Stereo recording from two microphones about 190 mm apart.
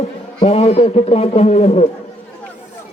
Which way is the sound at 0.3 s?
30° left (ahead or behind).